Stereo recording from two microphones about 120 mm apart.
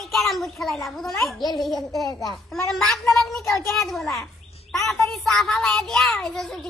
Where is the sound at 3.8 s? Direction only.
Centre (ahead or behind).